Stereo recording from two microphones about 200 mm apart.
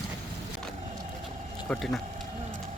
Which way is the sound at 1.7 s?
5° left (ahead or behind).